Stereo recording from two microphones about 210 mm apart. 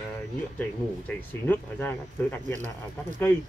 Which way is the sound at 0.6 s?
10° left (ahead or behind).